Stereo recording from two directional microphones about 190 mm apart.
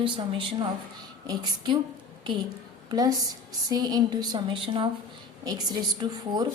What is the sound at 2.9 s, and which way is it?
A woman's voice, 20° right (ahead or behind).